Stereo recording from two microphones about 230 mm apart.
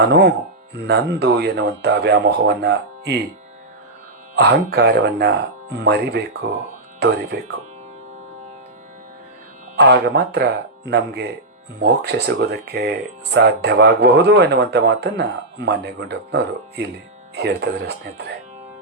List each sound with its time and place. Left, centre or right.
0.1 s speech: right
4.4 s speech: right
9.7 s speech: right